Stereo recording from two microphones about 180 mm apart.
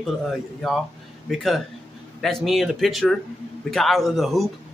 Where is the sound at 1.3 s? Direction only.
Centre (ahead or behind).